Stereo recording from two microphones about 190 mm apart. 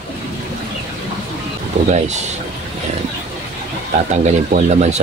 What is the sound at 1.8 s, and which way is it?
Speech, 35° right (ahead or behind).